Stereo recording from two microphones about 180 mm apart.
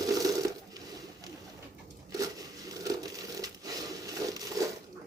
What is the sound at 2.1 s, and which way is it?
Crumpling, 20° right (ahead or behind).